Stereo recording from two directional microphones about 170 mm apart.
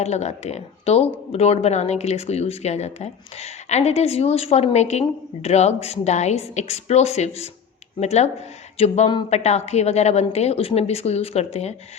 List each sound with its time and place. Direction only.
0.0 s speech: 40° left (ahead or behind)